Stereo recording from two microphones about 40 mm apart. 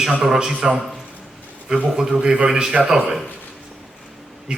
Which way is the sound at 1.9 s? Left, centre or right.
Centre.